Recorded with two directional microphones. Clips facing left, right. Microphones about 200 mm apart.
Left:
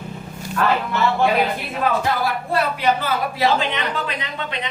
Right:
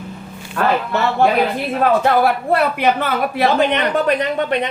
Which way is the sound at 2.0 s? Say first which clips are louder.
Right 7 dB; 60° right (ahead or behind).